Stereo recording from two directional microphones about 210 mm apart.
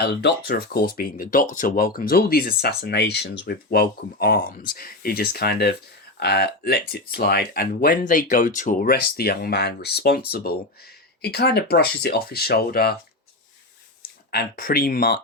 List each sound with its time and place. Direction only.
0.0 s speech: 50° left (ahead or behind)
14.3 s speech: 45° left (ahead or behind)